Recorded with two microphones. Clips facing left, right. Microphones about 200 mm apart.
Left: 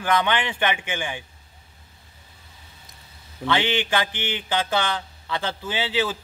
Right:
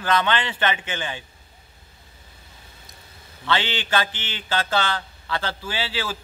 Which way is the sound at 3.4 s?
15° left (ahead or behind).